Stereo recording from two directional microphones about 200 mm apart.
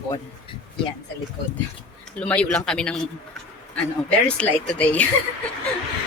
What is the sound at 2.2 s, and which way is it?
A woman's voice, 5° left (ahead or behind).